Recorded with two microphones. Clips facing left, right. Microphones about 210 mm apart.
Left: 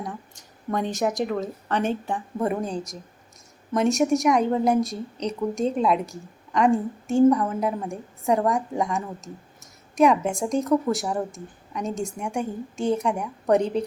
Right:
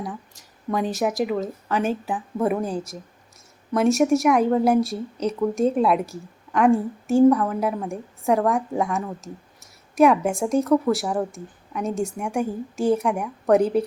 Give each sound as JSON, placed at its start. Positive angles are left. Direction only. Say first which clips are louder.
{"t": 0.0, "sound": "speech", "louder": "right 2 dB", "side_deg": 0}